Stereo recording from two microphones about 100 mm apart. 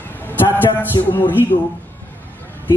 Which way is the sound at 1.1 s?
20° left (ahead or behind).